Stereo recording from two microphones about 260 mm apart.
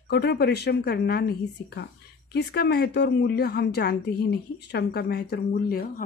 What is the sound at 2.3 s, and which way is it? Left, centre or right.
Speech, left.